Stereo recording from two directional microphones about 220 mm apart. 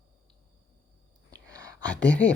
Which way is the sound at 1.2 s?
15° right (ahead or behind).